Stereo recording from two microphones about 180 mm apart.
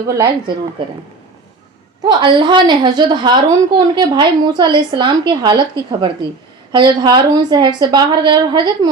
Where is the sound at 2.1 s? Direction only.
25° right (ahead or behind).